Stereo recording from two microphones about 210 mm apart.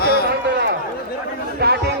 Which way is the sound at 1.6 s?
50° right (ahead or behind).